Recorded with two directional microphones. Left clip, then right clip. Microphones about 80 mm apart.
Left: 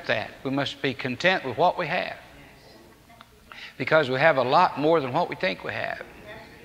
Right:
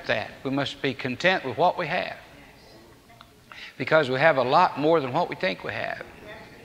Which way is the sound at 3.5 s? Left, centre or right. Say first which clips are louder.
Even; right.